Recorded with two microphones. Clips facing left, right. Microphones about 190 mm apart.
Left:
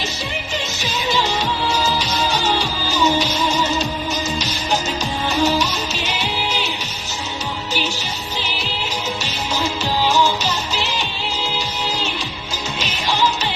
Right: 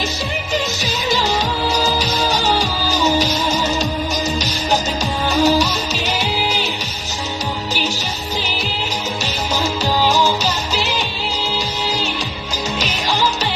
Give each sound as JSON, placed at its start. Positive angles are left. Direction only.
{"t": 0.8, "sound": "music", "side_deg": -40}